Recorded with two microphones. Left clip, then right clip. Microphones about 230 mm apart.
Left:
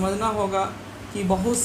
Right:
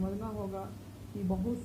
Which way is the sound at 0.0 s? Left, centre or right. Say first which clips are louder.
Left 16 dB; centre.